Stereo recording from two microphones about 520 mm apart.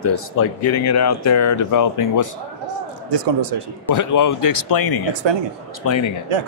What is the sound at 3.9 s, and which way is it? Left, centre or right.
A man's voice, left.